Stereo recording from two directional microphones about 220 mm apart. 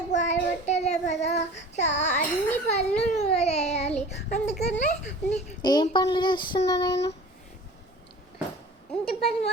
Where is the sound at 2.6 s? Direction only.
30° left (ahead or behind).